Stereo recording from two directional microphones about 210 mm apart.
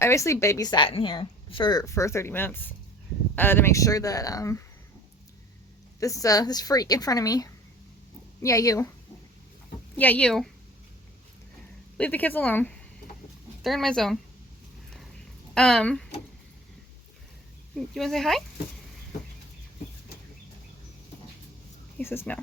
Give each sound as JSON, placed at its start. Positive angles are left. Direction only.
{"t": 0.0, "sound": "speech", "side_deg": 15}
{"t": 6.0, "sound": "speech", "side_deg": 15}
{"t": 10.0, "sound": "speech", "side_deg": 5}
{"t": 11.9, "sound": "speech", "side_deg": 5}
{"t": 15.5, "sound": "speech", "side_deg": 5}
{"t": 17.7, "sound": "speech", "side_deg": 0}
{"t": 21.9, "sound": "speech", "side_deg": 10}